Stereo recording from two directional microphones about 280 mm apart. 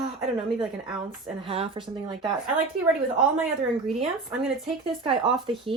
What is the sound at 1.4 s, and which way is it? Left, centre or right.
Speech, centre.